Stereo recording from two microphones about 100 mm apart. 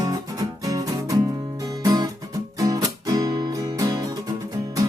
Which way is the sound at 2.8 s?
35° right (ahead or behind).